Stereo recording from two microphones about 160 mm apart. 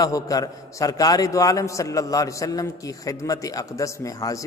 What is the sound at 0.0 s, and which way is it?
A man's voice, 20° left (ahead or behind).